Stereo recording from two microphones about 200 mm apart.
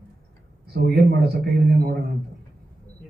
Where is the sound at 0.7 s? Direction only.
50° right (ahead or behind).